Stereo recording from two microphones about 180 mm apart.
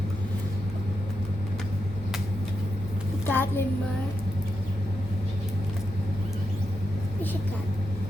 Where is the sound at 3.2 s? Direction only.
10° left (ahead or behind).